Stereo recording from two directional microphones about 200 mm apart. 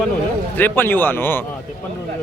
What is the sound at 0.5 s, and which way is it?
Speech, 10° left (ahead or behind).